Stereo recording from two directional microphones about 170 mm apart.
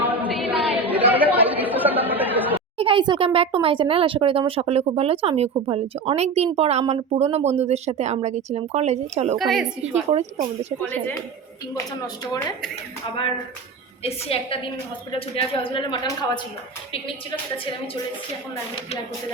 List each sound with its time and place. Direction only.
0.0 s chatter: 10° right (ahead or behind)
2.7 s speech: 30° right (ahead or behind)
9.4 s a woman's voice: centre (ahead or behind)
10.1 s speech: 40° right (ahead or behind)
11.7 s a woman's voice: 25° left (ahead or behind)
14.0 s a woman's voice: 35° left (ahead or behind)